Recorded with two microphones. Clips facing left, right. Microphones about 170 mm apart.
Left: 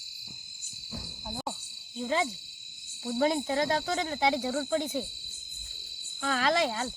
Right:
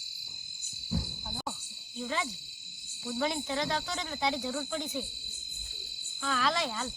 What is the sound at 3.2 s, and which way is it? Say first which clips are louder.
Speech: left 5 dB; 45° left (ahead or behind).